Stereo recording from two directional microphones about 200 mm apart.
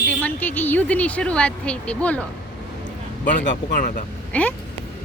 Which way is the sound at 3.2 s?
40° left (ahead or behind).